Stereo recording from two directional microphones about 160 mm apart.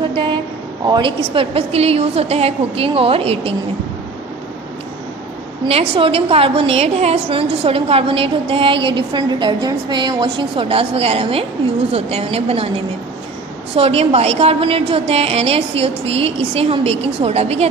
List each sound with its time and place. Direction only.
0.8 s a woman's voice: 30° right (ahead or behind)
5.7 s a woman's voice: 35° right (ahead or behind)
13.7 s a woman's voice: 35° right (ahead or behind)